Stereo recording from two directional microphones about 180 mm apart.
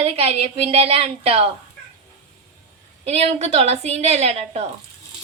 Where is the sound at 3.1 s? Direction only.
35° right (ahead or behind).